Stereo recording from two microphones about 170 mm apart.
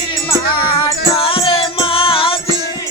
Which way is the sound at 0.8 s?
35° left (ahead or behind).